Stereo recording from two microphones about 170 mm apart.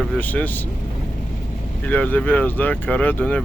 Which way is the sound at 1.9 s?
10° left (ahead or behind).